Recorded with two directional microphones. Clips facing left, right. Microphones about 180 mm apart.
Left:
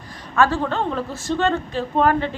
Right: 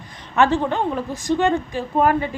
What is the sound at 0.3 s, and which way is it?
A woman's voice, 20° right (ahead or behind).